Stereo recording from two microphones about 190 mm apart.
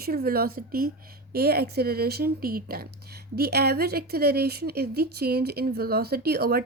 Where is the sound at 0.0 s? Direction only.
55° right (ahead or behind).